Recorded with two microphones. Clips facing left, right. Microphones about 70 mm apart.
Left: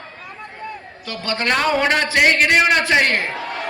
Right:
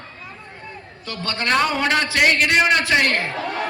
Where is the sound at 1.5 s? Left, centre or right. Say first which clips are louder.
Left 1 dB; centre.